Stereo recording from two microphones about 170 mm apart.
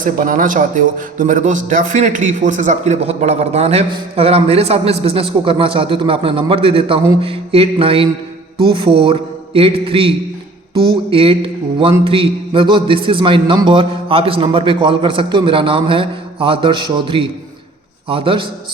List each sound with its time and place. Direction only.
0.0 s a man's voice: 50° right (ahead or behind); by 18.4 s 30° right (ahead or behind)